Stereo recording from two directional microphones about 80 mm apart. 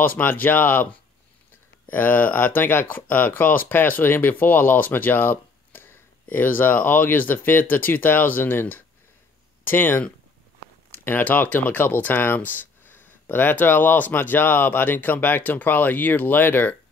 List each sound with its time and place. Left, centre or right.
0.0 s speech: left
1.9 s speech: left